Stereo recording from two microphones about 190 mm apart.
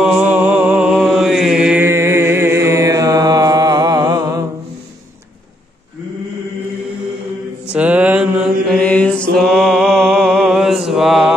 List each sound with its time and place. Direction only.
0.0 s mantra: 5° right (ahead or behind)
7.7 s mantra: 10° right (ahead or behind)
8.7 s mantra: 5° left (ahead or behind)